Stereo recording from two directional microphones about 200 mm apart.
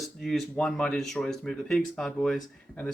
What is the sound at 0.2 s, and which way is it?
Speech, centre (ahead or behind).